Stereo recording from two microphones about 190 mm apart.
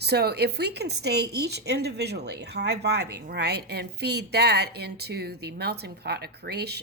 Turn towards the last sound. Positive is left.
turn(degrees=-60)  # may be behind; listen again after turning